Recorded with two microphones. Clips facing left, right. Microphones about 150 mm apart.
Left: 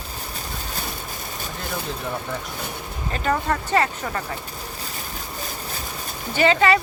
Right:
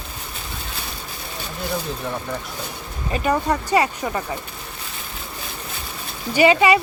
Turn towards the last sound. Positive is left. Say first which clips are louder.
# right 3 dB
turn(degrees=-15)  # may be behind; listen again after turning